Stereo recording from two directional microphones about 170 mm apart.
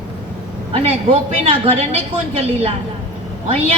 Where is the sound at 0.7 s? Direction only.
35° right (ahead or behind).